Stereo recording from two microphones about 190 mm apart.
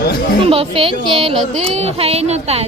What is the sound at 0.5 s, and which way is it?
Speech, 30° right (ahead or behind).